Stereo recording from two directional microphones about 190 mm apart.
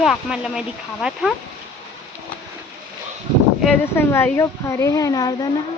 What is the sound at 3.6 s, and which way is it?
Speech, 10° left (ahead or behind).